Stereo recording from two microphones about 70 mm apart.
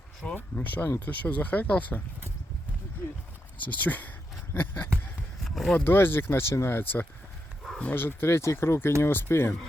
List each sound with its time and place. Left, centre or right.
0.3 s speech: left
3.6 s speech: left
5.4 s a sound: centre
5.8 s speech: left